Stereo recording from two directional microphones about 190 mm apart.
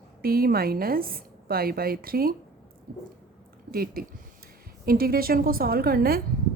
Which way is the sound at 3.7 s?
50° right (ahead or behind).